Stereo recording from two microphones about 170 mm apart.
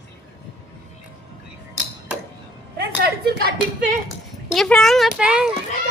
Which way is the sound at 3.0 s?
75° right (ahead or behind).